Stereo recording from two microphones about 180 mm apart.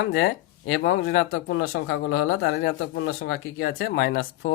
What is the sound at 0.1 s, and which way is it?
Speech, 70° left (ahead or behind).